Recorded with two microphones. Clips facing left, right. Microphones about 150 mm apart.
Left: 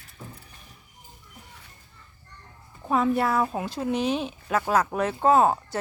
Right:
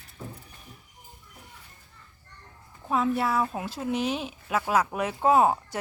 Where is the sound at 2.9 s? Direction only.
Centre (ahead or behind).